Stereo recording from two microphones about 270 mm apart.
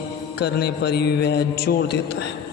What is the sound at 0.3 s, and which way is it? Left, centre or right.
A man's voice, left.